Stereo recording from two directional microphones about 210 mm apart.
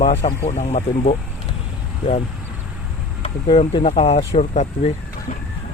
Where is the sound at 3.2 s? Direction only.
25° left (ahead or behind).